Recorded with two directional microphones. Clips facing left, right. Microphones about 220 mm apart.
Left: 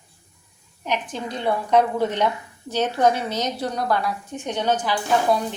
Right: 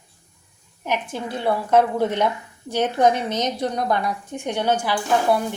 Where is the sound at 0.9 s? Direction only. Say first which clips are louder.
Right 1 dB; 10° right (ahead or behind).